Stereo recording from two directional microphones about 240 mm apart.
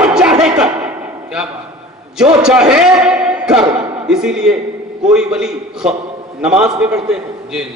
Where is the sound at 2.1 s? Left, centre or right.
Centre.